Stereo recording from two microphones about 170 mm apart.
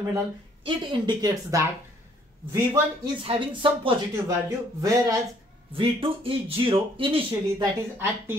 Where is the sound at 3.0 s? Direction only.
30° right (ahead or behind).